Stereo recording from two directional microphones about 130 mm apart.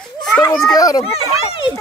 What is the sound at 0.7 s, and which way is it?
Speech, 25° left (ahead or behind).